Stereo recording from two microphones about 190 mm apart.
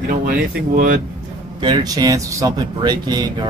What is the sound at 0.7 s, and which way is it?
Speech, 50° right (ahead or behind).